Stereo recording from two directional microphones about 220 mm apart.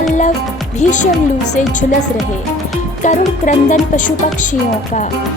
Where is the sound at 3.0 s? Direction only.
35° left (ahead or behind).